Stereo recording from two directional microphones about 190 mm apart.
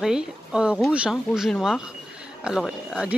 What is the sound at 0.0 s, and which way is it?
Speech, 5° right (ahead or behind).